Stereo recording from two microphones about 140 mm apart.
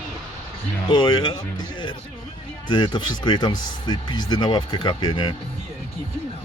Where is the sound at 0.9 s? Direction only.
30° left (ahead or behind).